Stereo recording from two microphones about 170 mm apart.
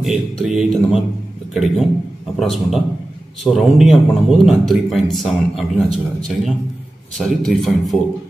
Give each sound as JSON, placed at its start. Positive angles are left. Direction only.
{"t": 0.0, "sound": "speech", "side_deg": 0}